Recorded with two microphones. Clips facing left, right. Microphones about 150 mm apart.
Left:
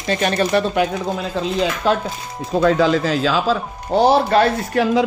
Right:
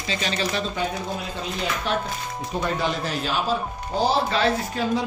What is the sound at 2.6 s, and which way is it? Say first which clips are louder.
Speech: left 11 dB; 90° left.